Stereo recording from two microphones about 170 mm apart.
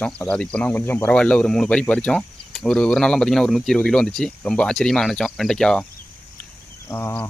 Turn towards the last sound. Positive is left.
turn(degrees=10)  # may be behind; listen again after turning